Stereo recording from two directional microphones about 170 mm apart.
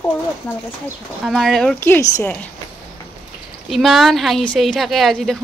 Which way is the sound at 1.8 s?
15° left (ahead or behind).